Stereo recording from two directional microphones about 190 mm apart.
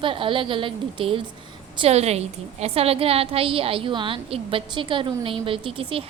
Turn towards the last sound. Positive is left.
turn(degrees=-30)  # may be behind; listen again after turning